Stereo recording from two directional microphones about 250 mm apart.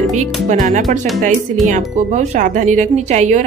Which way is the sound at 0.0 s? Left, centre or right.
Right.